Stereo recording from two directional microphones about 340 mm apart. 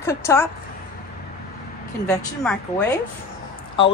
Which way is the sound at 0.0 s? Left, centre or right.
Centre.